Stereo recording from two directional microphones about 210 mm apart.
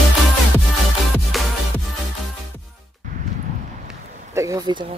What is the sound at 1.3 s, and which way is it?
Music, centre (ahead or behind).